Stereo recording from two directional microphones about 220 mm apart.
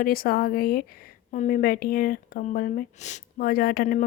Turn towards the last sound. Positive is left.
turn(degrees=40)  # may be behind; listen again after turning